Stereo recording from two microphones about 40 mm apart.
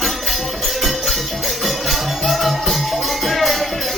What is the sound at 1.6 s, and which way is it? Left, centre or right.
Music, centre.